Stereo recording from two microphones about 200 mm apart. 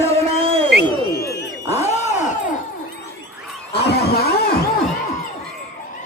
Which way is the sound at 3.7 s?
55° left (ahead or behind).